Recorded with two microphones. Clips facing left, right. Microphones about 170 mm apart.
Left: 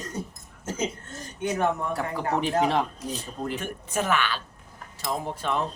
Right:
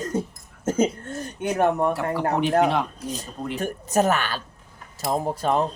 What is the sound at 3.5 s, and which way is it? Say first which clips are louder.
Speech: right 10 dB; 40° right (ahead or behind).